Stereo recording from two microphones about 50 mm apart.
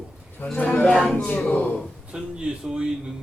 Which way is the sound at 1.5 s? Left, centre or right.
Left.